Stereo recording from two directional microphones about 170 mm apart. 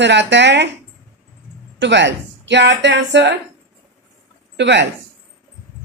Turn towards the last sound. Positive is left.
turn(degrees=-90)